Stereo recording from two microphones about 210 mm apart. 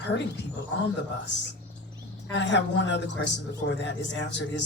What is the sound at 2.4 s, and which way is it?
A man's voice, 55° left (ahead or behind).